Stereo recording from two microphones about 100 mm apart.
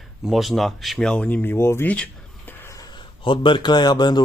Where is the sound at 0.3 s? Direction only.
Centre (ahead or behind); by 2.0 s 15° left (ahead or behind).